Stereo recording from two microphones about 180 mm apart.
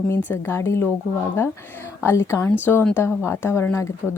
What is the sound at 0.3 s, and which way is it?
Speech, 15° left (ahead or behind).